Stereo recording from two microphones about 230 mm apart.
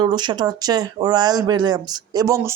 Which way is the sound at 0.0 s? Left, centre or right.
Centre.